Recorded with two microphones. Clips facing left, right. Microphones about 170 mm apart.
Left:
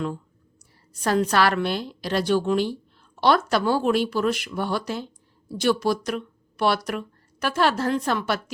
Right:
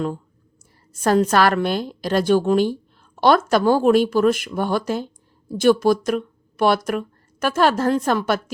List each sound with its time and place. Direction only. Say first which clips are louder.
0.9 s a woman's voice: right 4 dB; 45° right (ahead or behind)